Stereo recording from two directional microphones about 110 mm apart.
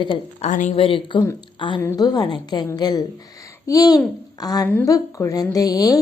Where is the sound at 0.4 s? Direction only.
60° left (ahead or behind).